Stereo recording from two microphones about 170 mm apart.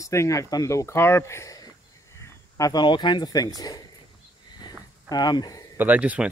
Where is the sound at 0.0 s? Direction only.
20° left (ahead or behind).